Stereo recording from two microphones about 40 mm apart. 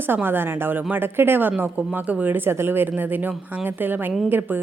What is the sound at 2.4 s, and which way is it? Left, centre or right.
A woman's voice, right.